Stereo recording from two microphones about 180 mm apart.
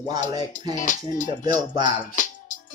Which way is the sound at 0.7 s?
45° left (ahead or behind).